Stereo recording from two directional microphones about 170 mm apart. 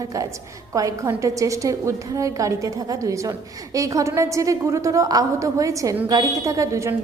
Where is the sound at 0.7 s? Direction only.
20° right (ahead or behind).